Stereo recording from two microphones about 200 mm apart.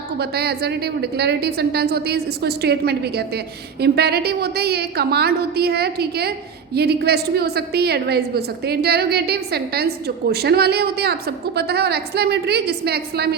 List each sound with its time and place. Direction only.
0.2 s a woman's voice: 55° right (ahead or behind)